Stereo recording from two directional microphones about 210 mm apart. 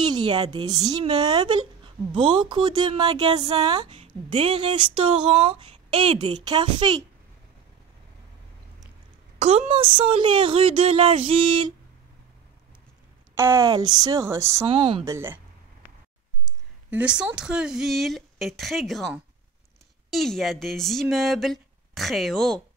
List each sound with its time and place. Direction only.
0.0 s speech: 20° right (ahead or behind)
9.4 s speech: 30° right (ahead or behind)
13.3 s speech: 10° right (ahead or behind)
14.7 s speech: 25° right (ahead or behind)
15.0 s speech: 10° right (ahead or behind)
16.9 s speech: 5° right (ahead or behind)